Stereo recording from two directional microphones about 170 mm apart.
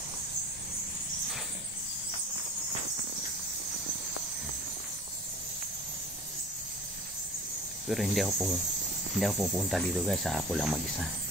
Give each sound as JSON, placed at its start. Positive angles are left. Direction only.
{"t": 7.9, "sound": "speech", "side_deg": 0}